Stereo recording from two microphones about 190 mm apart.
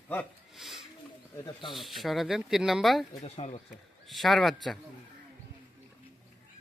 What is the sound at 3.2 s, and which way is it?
Speech, 35° left (ahead or behind).